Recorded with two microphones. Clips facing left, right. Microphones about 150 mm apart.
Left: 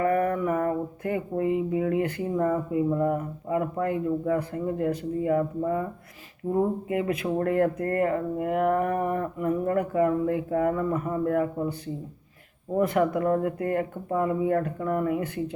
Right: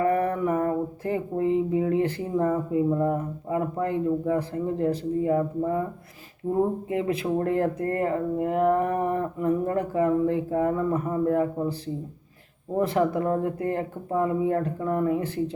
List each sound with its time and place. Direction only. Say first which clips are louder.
0.0 s a sound: right 1 dB; 30° right (ahead or behind)
1.7 s speech: right 2 dB; 30° right (ahead or behind)
6.8 s speech: right 1 dB; 30° right (ahead or behind)
12.8 s speech: even; 30° right (ahead or behind)